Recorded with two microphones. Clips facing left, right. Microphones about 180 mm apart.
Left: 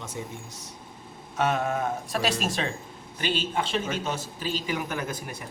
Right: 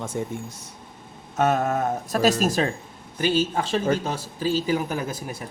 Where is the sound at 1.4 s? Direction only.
40° right (ahead or behind).